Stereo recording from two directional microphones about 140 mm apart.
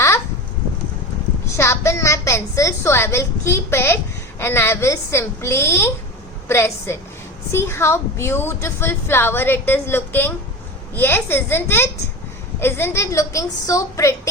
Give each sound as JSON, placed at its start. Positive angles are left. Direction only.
{"t": 1.5, "sound": "a woman's voice", "side_deg": 20}